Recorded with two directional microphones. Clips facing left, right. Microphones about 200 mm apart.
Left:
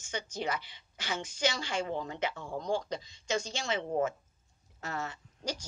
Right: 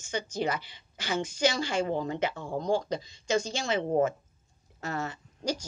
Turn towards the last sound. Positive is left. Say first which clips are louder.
# right 4 dB
turn(degrees=-40)  # may be behind; listen again after turning